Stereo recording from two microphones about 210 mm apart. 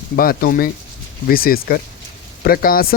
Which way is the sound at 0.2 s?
45° left (ahead or behind).